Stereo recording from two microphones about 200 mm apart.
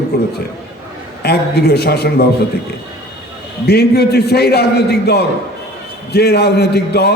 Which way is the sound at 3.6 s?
55° left (ahead or behind).